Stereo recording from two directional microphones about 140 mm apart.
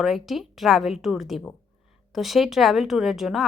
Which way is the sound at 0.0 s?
Centre (ahead or behind).